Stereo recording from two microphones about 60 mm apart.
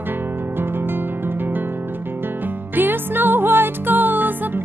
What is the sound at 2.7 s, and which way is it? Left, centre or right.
Music, right.